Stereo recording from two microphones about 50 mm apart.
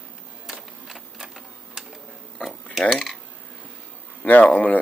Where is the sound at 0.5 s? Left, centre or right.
Centre.